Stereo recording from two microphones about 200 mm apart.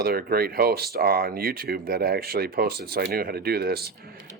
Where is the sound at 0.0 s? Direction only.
50° right (ahead or behind).